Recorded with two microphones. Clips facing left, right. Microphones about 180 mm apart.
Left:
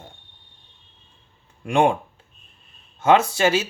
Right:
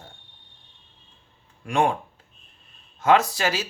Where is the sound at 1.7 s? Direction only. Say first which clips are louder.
Left 4 dB; 25° left (ahead or behind).